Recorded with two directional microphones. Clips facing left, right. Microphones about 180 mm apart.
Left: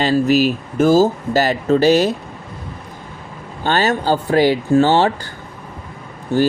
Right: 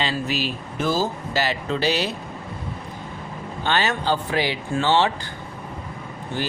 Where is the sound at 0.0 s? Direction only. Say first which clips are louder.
Left 11 dB; 45° left (ahead or behind).